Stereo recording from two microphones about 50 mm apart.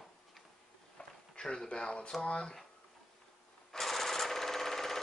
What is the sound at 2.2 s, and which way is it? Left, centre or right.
Speech, left.